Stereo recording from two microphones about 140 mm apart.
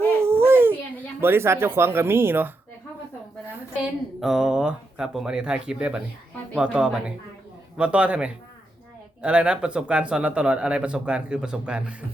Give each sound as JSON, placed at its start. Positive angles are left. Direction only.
{"t": 0.2, "sound": "a sound", "side_deg": -15}
{"t": 1.2, "sound": "speech", "side_deg": -15}
{"t": 4.2, "sound": "speech", "side_deg": -5}